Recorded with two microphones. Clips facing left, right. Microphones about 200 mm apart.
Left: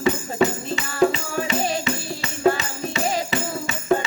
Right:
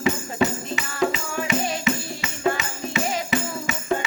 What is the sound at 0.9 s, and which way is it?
Music, 35° left (ahead or behind).